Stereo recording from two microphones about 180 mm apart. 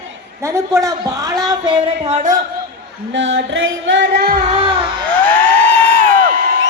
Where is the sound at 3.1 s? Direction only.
90° right.